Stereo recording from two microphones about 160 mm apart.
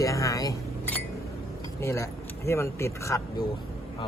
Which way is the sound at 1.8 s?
20° left (ahead or behind).